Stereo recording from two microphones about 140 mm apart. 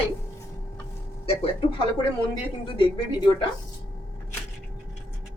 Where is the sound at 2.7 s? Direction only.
35° left (ahead or behind).